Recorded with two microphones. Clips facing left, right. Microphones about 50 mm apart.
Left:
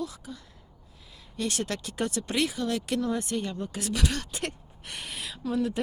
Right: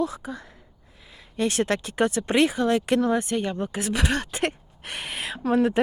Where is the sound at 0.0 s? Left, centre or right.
Right.